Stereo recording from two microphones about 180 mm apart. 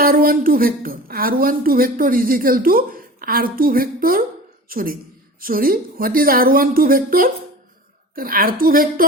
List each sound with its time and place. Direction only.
0.0 s a woman's voice: 55° right (ahead or behind)